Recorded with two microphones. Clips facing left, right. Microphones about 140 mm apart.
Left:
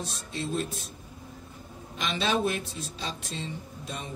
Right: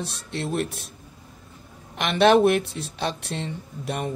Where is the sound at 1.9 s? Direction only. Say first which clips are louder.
Right 11 dB; 65° right (ahead or behind).